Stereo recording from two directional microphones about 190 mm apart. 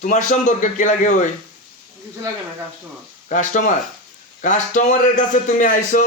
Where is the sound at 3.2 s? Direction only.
40° left (ahead or behind).